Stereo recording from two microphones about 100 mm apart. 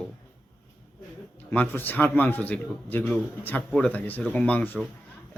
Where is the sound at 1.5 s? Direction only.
20° left (ahead or behind).